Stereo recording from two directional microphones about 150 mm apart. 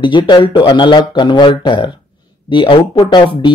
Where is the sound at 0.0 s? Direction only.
30° left (ahead or behind).